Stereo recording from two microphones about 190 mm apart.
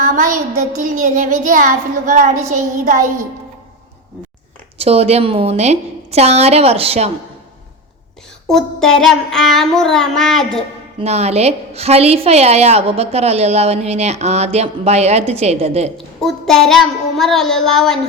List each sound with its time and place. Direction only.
0.0 s a sound: 45° right (ahead or behind)
1.0 s child singing: 45° right (ahead or behind)
4.8 s a woman's voice: 30° right (ahead or behind)
8.4 s child singing: 5° left (ahead or behind)
11.0 s a woman's voice: 35° right (ahead or behind)
16.0 s child singing: centre (ahead or behind)